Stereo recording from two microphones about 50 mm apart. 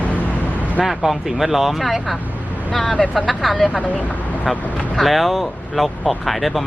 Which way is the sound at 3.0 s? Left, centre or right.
Left.